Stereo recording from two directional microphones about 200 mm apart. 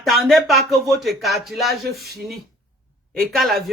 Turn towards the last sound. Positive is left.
turn(degrees=0)  # may be behind; listen again after turning